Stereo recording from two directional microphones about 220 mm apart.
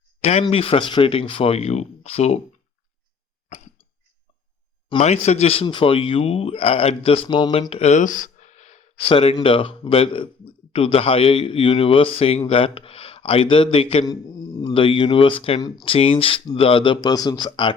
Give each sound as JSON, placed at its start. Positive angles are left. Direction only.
{"t": 0.2, "sound": "speech", "side_deg": 30}
{"t": 3.5, "sound": "cough", "side_deg": 35}
{"t": 4.9, "sound": "speech", "side_deg": 30}